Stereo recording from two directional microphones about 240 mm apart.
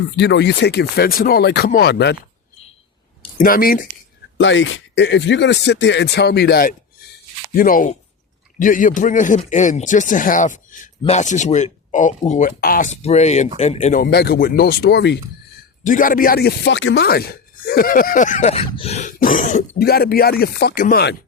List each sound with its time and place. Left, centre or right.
0.2 s speech: left
3.3 s speech: left
4.4 s speech: left
15.8 s speech: left